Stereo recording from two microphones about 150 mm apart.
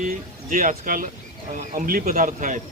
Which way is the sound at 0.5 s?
60° right (ahead or behind).